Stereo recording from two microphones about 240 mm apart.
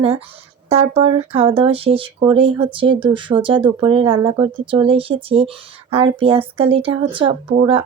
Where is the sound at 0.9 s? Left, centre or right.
Right.